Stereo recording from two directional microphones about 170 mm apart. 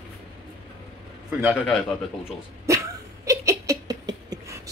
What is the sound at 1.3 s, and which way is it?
Speech, 5° right (ahead or behind).